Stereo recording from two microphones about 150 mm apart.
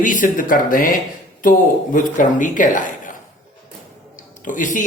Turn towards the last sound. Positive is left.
turn(degrees=60)  # may be behind; listen again after turning